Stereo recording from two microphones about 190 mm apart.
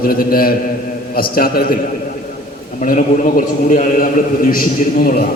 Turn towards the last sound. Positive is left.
turn(degrees=50)  # may be behind; listen again after turning